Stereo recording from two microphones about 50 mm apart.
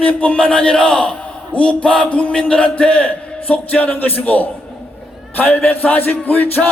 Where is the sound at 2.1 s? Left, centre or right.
Left.